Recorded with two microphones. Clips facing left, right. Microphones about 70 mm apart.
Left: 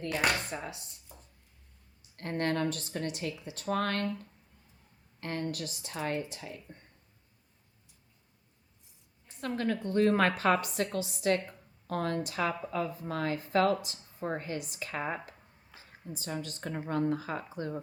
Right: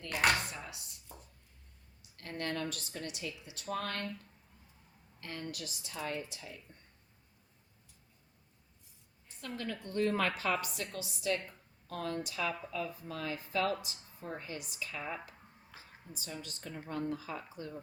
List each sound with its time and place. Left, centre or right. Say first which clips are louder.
0.5 s speech: left 7 dB; left
2.0 s speech: left 8 dB; left
3.7 s speech: left 7 dB; left
5.2 s speech: left 7 dB; left
9.4 s speech: left 9 dB; left
16.2 s speech: left 7 dB; left